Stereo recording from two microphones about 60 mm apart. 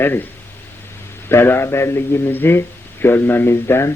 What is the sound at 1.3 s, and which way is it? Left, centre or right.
A man's voice, left.